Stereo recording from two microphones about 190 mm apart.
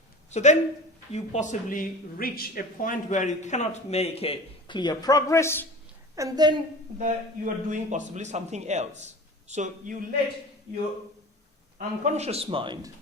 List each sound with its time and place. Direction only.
0.3 s speech: 35° left (ahead or behind); by 5.6 s 15° left (ahead or behind)
6.1 s a woman's voice: 20° right (ahead or behind)
7.0 s a man's voice: 40° right (ahead or behind)
11.8 s a man's voice: 40° right (ahead or behind)